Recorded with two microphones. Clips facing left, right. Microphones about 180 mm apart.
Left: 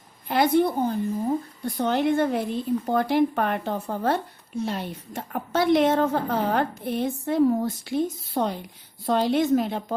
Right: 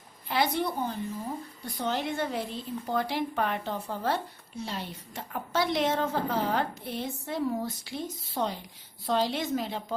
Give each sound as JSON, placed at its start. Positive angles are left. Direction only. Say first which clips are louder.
{"t": 0.3, "sound": "a woman's voice", "louder": "left 8 dB", "side_deg": 50}